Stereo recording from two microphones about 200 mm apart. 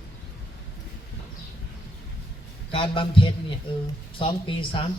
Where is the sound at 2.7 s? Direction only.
25° left (ahead or behind).